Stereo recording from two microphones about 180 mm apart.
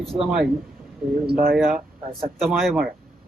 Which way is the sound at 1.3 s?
55° right (ahead or behind).